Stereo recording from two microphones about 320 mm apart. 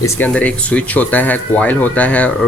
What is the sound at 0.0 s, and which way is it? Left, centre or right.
Speech, centre.